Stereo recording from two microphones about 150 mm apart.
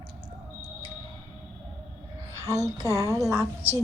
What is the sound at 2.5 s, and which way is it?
Speech, 20° right (ahead or behind).